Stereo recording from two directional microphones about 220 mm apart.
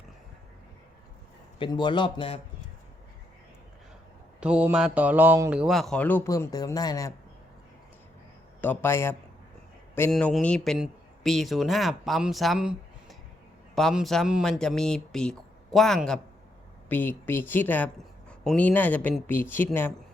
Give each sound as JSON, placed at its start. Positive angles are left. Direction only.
{"t": 1.5, "sound": "a man's voice", "side_deg": 20}
{"t": 4.4, "sound": "a man's voice", "side_deg": -5}
{"t": 8.6, "sound": "a man's voice", "side_deg": 10}